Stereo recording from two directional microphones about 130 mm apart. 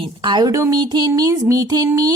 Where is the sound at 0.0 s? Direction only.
40° right (ahead or behind).